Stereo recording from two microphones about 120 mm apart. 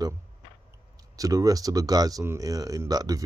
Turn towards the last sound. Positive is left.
turn(degrees=-30)  # may be behind; listen again after turning